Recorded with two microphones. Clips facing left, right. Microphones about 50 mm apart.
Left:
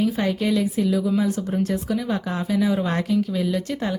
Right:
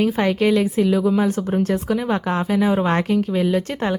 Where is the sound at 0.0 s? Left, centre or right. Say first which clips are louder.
Right 4 dB; right.